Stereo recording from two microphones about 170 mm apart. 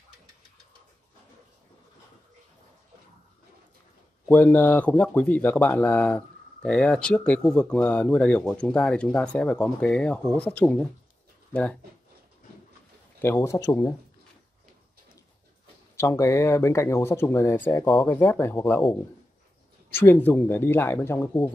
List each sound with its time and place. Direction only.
4.3 s speech: 10° left (ahead or behind)
13.2 s speech: 15° left (ahead or behind)
16.0 s speech: 15° left (ahead or behind)
19.9 s speech: 10° left (ahead or behind)